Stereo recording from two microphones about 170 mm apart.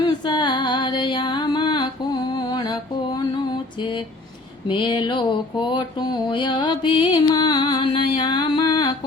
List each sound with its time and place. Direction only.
0.0 s music: 25° left (ahead or behind)
4.7 s mantra: 30° left (ahead or behind)